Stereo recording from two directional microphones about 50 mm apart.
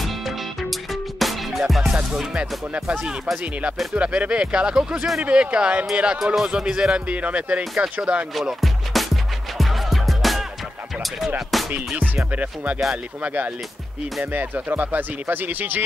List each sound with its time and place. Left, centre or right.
1.2 s music: centre
1.9 s speech: centre
7.1 s speech: right
8.4 s music: centre
11.1 s speech: centre
12.4 s speech: right